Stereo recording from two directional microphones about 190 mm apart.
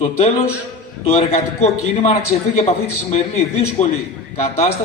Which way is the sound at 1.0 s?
35° left (ahead or behind).